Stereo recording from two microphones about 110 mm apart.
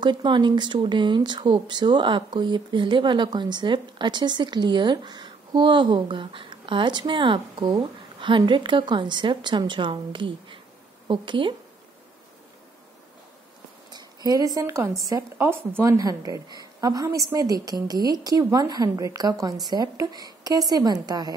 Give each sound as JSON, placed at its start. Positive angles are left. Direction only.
{"t": 0.0, "sound": "speech", "side_deg": -45}
{"t": 13.8, "sound": "a woman's voice", "side_deg": -40}